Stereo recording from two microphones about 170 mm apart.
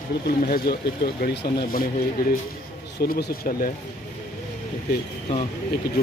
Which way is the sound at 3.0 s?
70° left (ahead or behind).